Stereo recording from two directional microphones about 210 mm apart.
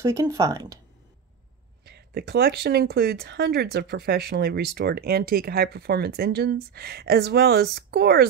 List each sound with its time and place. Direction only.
0.0 s speech: 15° right (ahead or behind)
1.9 s speech: 50° right (ahead or behind)